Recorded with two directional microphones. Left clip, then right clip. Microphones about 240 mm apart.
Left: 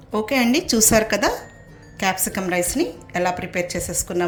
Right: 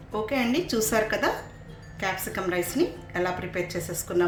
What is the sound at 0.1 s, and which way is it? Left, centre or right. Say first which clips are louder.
A woman's voice: left 7 dB; left.